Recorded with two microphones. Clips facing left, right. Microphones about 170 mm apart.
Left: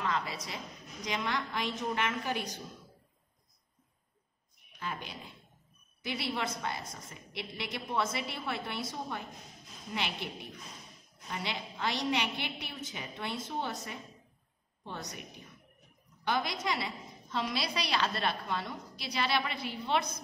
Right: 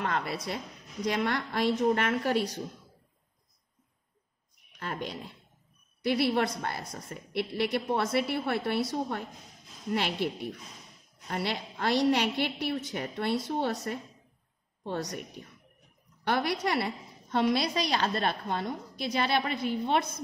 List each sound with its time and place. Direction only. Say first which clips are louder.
0.0 s a woman's voice: right 3 dB; 60° right (ahead or behind)
4.7 s a woman's voice: right 5 dB; 65° right (ahead or behind)
16.3 s a woman's voice: right 4 dB; 65° right (ahead or behind); by 20.1 s 50° right (ahead or behind)